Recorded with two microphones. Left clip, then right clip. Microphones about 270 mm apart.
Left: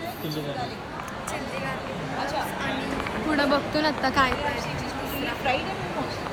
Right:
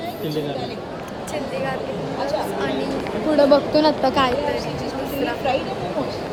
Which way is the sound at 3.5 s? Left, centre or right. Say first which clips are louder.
Right 8 dB; right.